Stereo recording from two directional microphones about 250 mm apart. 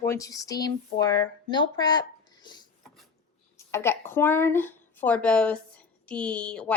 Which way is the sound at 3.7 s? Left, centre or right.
Centre.